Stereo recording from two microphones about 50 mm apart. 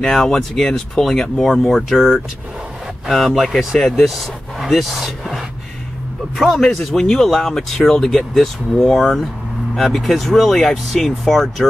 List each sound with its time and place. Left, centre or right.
0.0 s speech: centre